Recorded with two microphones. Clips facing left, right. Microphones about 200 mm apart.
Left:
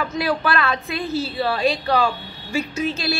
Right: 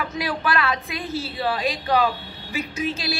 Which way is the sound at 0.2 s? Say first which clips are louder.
Left 3 dB; 15° right (ahead or behind).